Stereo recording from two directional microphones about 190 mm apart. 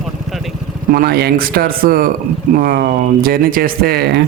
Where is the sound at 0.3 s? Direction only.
Centre (ahead or behind).